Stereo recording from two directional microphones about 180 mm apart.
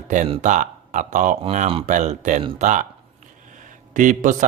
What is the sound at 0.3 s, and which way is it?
Speech, 40° right (ahead or behind).